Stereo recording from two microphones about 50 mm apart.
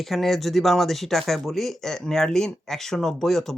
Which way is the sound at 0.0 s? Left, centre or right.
Centre.